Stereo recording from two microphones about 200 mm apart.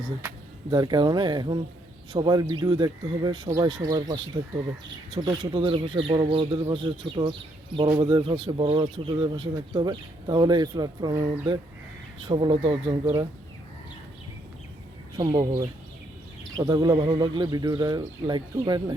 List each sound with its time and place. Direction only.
0.7 s speech: 20° right (ahead or behind)
15.2 s speech: 25° right (ahead or behind)